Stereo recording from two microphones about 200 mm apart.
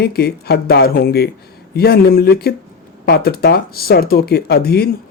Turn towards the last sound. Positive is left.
turn(degrees=55)  # may be behind; listen again after turning